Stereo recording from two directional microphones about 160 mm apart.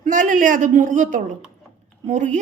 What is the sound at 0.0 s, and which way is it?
A woman's voice, 55° right (ahead or behind).